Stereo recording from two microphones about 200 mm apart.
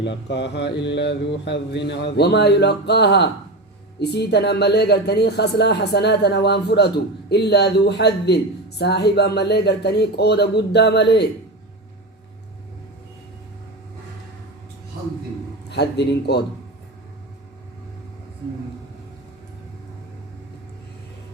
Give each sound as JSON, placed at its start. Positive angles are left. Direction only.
{"t": 0.0, "sound": "speech", "side_deg": 60}
{"t": 15.7, "sound": "speech", "side_deg": 55}